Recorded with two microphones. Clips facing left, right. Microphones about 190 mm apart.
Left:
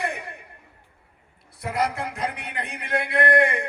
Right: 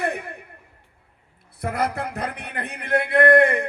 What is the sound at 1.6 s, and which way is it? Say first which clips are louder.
Speech: right 1 dB; 55° right (ahead or behind).